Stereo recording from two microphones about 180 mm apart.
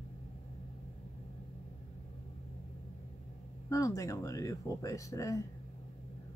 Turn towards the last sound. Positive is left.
turn(degrees=20)  # may be behind; listen again after turning